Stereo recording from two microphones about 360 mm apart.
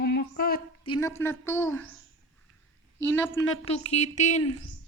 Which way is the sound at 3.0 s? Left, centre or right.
Centre.